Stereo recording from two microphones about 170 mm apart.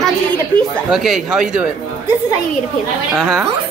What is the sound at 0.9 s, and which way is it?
Speech, centre (ahead or behind).